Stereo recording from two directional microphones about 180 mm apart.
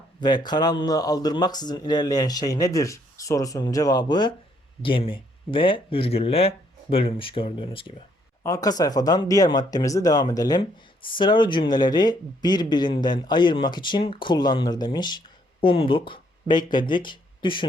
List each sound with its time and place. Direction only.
0.2 s speech: 25° left (ahead or behind)
8.4 s speech: 20° left (ahead or behind)